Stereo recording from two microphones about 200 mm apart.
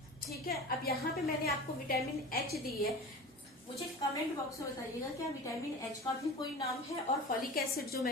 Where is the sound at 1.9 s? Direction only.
50° left (ahead or behind).